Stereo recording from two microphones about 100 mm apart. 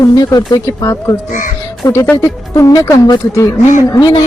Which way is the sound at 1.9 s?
20° left (ahead or behind).